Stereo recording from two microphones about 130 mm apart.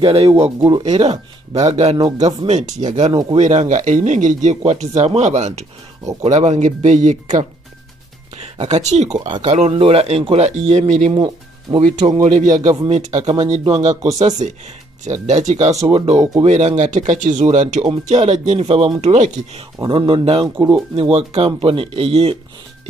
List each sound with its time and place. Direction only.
0.0 s speech: 45° right (ahead or behind)
0.6 s speech: 35° right (ahead or behind)
2.1 s speech: 60° right (ahead or behind)
3.1 s speech: 35° right (ahead or behind)
3.3 s speech: 70° right (ahead or behind)
8.4 s speech: 60° right (ahead or behind)
11.1 s speech: 35° right (ahead or behind)
12.1 s speech: 65° right (ahead or behind); by 13.7 s 50° right (ahead or behind)
14.1 s speech: 65° right (ahead or behind)
19.8 s speech: 40° right (ahead or behind)
20.4 s speech: 25° right (ahead or behind)
20.7 s speech: 45° right (ahead or behind)